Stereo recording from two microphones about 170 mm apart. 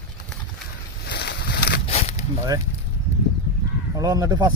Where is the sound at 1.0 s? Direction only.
75° left (ahead or behind).